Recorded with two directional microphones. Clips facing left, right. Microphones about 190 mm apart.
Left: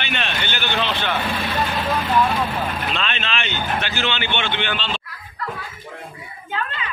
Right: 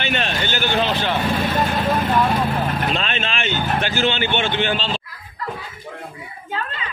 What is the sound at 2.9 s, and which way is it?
Speech, 45° right (ahead or behind).